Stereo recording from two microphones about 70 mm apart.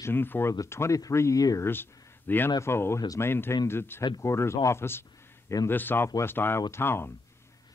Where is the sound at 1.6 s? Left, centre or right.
Left.